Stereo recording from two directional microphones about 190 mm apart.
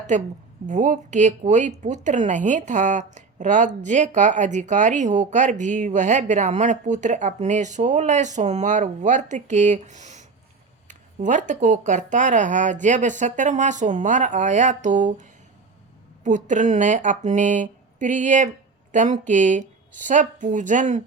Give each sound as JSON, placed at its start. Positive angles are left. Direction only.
{"t": 0.1, "sound": "speech", "side_deg": -40}